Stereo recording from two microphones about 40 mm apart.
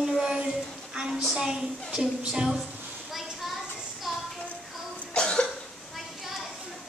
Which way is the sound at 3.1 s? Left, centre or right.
Centre.